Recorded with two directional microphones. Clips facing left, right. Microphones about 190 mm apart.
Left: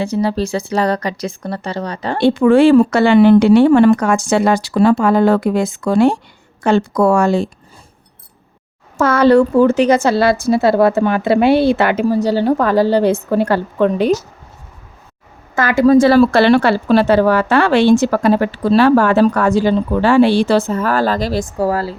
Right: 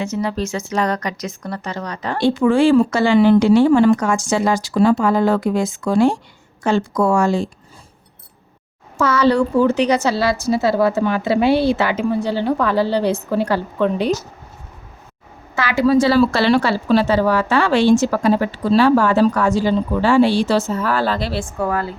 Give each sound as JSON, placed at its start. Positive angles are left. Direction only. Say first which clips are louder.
{"t": 0.0, "sound": "speech", "louder": "left 4 dB", "side_deg": 30}
{"t": 2.2, "sound": "a woman's voice", "louder": "left 4 dB", "side_deg": 65}
{"t": 9.0, "sound": "a woman's voice", "louder": "left 5 dB", "side_deg": 55}
{"t": 12.0, "sound": "a woman's voice", "louder": "left 5 dB", "side_deg": 40}
{"t": 15.5, "sound": "a woman's voice", "louder": "left 5 dB", "side_deg": 50}